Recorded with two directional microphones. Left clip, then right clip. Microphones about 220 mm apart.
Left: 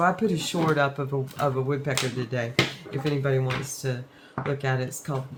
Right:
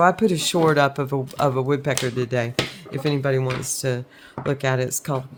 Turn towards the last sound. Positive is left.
turn(degrees=-50)  # may be behind; listen again after turning